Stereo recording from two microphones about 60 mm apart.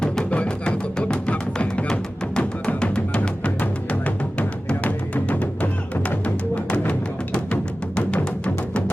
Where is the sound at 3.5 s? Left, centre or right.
Left.